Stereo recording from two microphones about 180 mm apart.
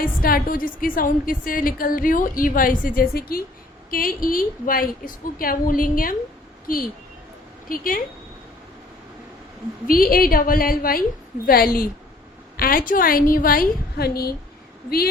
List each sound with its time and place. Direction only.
0.0 s a woman's voice: 55° left (ahead or behind)
9.8 s a woman's voice: 50° left (ahead or behind)